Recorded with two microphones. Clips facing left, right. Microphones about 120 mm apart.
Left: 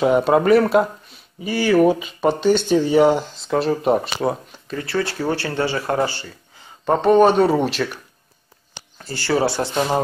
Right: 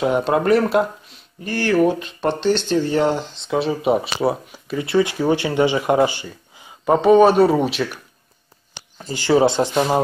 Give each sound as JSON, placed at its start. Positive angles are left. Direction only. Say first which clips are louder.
{"t": 0.0, "sound": "speech", "louder": "left 2 dB", "side_deg": 0}
{"t": 6.9, "sound": "speech", "louder": "right 2 dB", "side_deg": -5}
{"t": 8.9, "sound": "speech", "louder": "right 4 dB", "side_deg": -15}